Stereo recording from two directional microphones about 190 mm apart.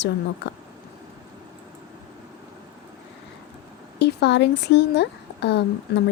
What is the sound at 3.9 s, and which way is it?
Speech, 65° left (ahead or behind).